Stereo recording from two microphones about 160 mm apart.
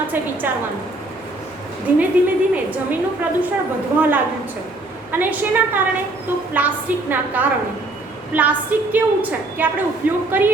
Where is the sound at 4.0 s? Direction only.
10° right (ahead or behind).